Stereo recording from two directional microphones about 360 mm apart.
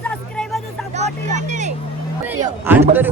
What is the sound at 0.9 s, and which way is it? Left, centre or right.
Speech, centre.